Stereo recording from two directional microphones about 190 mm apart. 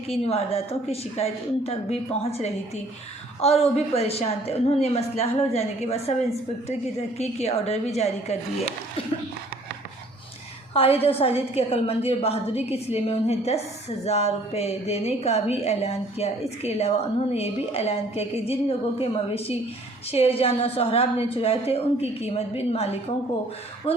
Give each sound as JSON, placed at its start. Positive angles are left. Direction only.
{"t": 0.1, "sound": "a woman's voice", "side_deg": 30}
{"t": 7.2, "sound": "a woman's voice", "side_deg": 35}
{"t": 10.8, "sound": "a woman's voice", "side_deg": 30}